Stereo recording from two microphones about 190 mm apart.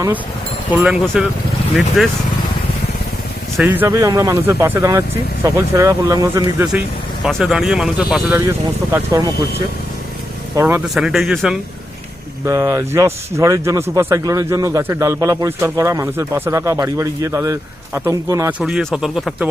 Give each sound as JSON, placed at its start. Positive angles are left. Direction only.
{"t": 0.7, "sound": "speech", "side_deg": -5}
{"t": 3.6, "sound": "a man's voice", "side_deg": -10}
{"t": 7.3, "sound": "speech", "side_deg": 0}
{"t": 8.4, "sound": "a man's voice", "side_deg": -15}
{"t": 10.5, "sound": "speech", "side_deg": -10}
{"t": 12.5, "sound": "a man's voice", "side_deg": -15}
{"t": 18.6, "sound": "speech", "side_deg": 0}